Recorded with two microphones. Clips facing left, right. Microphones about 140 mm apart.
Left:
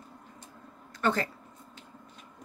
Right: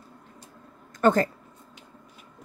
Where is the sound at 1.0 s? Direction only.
45° right (ahead or behind).